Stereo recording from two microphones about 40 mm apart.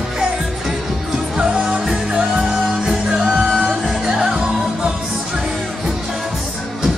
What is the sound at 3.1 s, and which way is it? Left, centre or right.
Music, centre.